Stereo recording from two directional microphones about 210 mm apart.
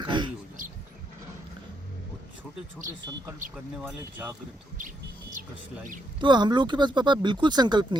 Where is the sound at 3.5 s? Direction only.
10° right (ahead or behind).